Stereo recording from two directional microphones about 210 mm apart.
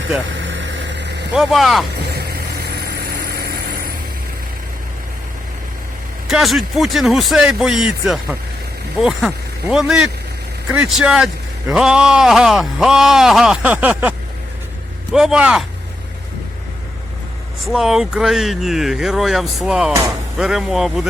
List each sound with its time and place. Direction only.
0.3 s vehicle: 60° right (ahead or behind)
1.3 s speech: centre (ahead or behind)
2.6 s vehicle: 50° right (ahead or behind)
6.2 s speech: centre (ahead or behind)
15.1 s speech: 5° right (ahead or behind)
17.7 s speech: centre (ahead or behind)